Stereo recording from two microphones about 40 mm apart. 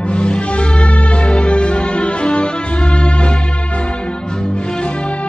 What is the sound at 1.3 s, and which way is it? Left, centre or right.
Music, left.